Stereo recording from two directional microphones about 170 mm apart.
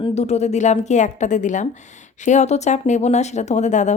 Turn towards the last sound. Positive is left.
turn(degrees=45)  # may be behind; listen again after turning